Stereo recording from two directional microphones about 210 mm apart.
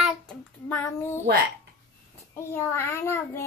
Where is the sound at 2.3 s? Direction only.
10° left (ahead or behind).